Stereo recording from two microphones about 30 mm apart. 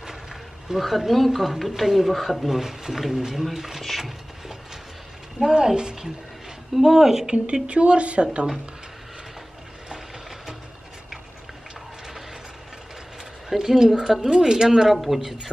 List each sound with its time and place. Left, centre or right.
0.0 s a sound: centre
0.7 s speech: centre
5.4 s speech: right
6.7 s speech: centre
7.3 s a woman's voice: right
13.5 s speech: centre
14.9 s speech: centre